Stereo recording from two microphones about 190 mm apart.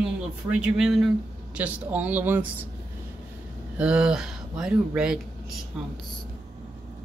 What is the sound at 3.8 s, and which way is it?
Speech, 5° right (ahead or behind).